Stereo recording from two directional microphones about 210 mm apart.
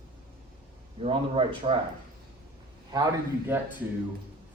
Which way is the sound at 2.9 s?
15° right (ahead or behind).